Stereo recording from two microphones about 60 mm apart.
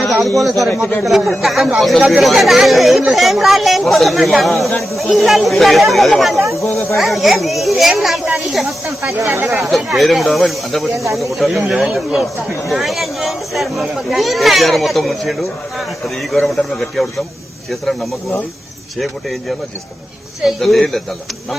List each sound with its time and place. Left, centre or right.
0.0 s speech: centre
9.1 s speech: right
9.6 s speech: centre
10.9 s speech: right
11.2 s speech: centre